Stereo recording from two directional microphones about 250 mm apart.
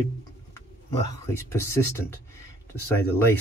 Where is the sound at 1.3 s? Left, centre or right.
Centre.